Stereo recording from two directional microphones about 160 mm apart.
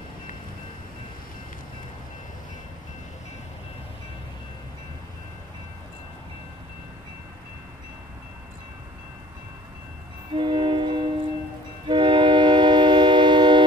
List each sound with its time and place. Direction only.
10.3 s train: 30° right (ahead or behind)
11.9 s music: 30° right (ahead or behind)